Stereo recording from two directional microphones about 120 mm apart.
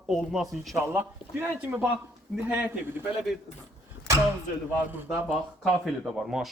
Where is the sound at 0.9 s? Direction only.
15° right (ahead or behind).